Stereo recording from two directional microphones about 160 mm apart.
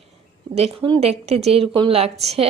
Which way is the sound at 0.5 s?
40° right (ahead or behind).